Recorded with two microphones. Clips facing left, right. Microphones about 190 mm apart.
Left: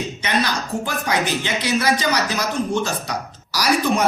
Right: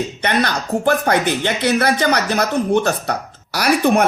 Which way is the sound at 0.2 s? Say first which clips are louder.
Right 3 dB; 60° right (ahead or behind).